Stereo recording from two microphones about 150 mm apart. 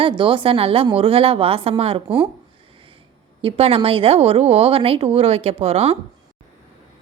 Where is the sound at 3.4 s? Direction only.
40° right (ahead or behind).